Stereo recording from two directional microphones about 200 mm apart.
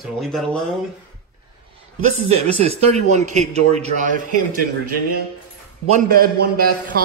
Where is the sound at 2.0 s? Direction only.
35° right (ahead or behind).